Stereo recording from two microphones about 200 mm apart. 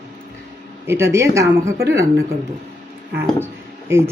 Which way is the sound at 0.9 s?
15° right (ahead or behind).